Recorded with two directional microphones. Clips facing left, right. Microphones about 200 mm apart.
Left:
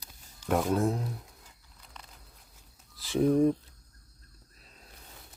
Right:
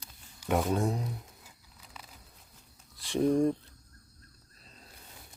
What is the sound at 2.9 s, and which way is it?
Speech, centre (ahead or behind).